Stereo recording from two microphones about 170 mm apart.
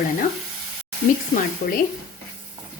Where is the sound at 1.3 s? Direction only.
55° left (ahead or behind).